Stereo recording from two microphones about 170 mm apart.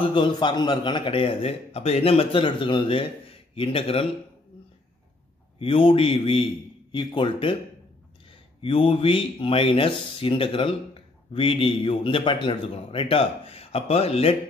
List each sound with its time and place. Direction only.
0.0 s a man's voice: 30° left (ahead or behind)
5.6 s a man's voice: 35° left (ahead or behind)
8.6 s a man's voice: 35° left (ahead or behind)